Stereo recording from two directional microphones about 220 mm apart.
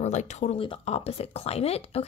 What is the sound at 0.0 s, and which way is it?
Speech, 30° left (ahead or behind).